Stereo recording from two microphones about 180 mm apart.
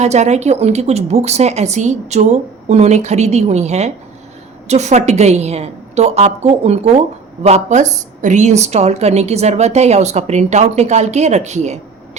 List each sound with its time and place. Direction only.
0.0 s a woman's voice: 40° right (ahead or behind)